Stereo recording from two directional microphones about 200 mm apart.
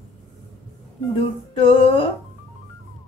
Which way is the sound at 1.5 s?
25° left (ahead or behind).